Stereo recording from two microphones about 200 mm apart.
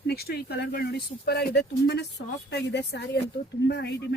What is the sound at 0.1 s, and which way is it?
Speech, 50° left (ahead or behind).